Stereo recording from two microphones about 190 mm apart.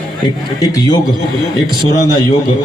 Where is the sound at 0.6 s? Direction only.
20° left (ahead or behind).